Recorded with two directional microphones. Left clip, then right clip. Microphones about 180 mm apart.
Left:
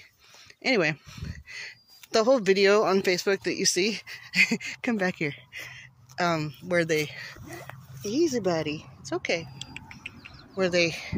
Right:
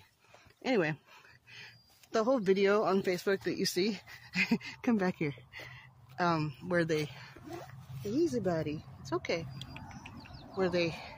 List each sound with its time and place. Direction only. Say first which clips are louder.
0.6 s speech: left 7 dB; 15° left (ahead or behind)
8.0 s a sound: left 6 dB; 15° left (ahead or behind)
10.6 s speech: left 7 dB; 10° left (ahead or behind)